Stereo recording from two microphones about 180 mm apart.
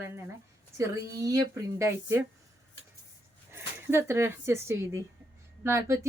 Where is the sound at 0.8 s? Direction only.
20° right (ahead or behind).